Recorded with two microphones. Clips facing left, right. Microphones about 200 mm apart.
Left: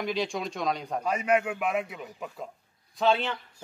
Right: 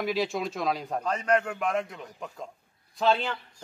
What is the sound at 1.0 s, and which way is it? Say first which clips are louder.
A man's voice: left 1 dB; 10° left (ahead or behind).